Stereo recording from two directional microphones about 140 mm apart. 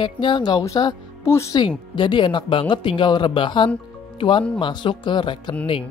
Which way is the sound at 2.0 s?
35° left (ahead or behind).